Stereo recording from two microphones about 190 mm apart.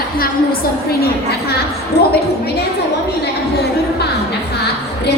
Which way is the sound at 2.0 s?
60° left (ahead or behind).